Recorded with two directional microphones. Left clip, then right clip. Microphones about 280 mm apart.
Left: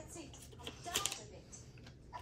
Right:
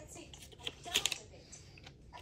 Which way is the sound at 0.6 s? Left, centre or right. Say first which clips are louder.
Right 5 dB; centre.